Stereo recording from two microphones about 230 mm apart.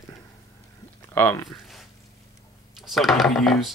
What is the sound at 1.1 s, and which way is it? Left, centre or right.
Speech, centre.